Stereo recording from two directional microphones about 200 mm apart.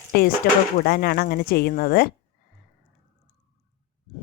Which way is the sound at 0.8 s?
50° left (ahead or behind).